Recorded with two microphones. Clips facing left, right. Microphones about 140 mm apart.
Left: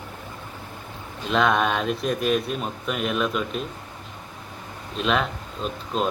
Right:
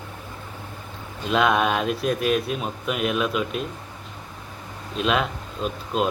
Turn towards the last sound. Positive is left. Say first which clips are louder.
# right 2 dB
turn(degrees=-5)  # may be behind; listen again after turning